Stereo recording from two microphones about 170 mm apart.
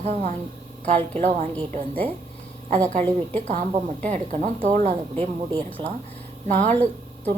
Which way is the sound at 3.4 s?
45° right (ahead or behind).